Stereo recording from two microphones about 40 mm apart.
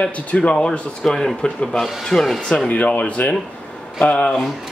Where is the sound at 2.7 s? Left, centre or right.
Left.